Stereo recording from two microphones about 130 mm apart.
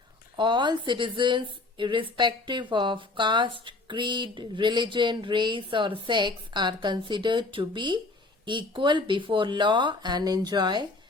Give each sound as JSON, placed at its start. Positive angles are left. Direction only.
{"t": 0.3, "sound": "a woman's voice", "side_deg": -35}